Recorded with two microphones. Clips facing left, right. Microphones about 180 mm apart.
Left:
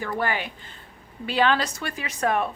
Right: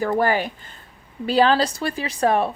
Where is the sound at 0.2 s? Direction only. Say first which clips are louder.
Right 7 dB; 40° right (ahead or behind).